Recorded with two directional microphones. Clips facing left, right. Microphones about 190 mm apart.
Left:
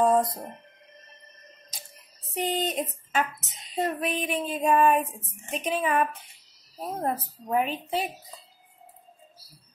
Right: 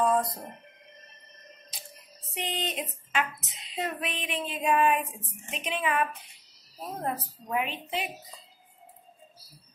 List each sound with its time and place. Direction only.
0.0 s speech: 40° left (ahead or behind)
2.3 s female singing: 40° left (ahead or behind)
5.5 s a woman's voice: 40° left (ahead or behind)